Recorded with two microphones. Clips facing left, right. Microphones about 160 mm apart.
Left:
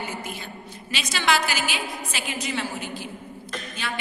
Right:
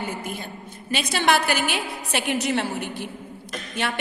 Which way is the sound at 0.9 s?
55° right (ahead or behind).